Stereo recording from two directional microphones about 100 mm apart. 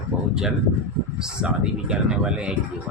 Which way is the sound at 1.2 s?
10° right (ahead or behind).